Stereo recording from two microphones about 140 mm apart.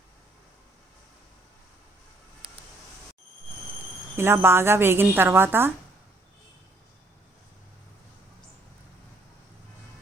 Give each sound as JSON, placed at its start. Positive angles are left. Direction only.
{"t": 4.2, "sound": "speech", "side_deg": -15}